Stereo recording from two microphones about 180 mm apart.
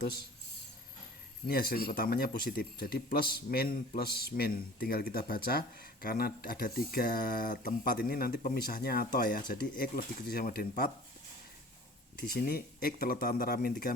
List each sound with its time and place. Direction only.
1.5 s speech: 55° left (ahead or behind)
12.3 s speech: 60° left (ahead or behind)